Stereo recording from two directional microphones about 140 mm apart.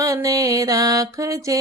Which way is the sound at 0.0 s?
25° right (ahead or behind).